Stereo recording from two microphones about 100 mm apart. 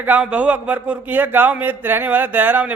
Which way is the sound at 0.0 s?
15° right (ahead or behind).